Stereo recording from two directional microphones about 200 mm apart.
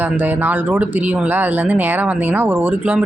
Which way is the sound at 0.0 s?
10° right (ahead or behind).